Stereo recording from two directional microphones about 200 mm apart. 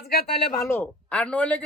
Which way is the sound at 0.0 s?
50° left (ahead or behind).